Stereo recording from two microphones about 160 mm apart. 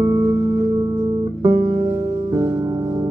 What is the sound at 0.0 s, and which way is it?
Music, 20° right (ahead or behind).